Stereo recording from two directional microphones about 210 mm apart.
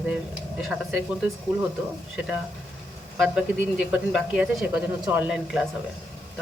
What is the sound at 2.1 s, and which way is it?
Speech, 5° right (ahead or behind).